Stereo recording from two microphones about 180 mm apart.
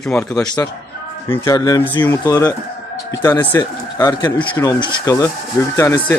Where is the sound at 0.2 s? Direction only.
20° left (ahead or behind).